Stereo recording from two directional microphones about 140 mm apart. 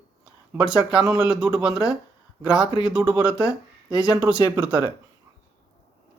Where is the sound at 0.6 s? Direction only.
5° right (ahead or behind).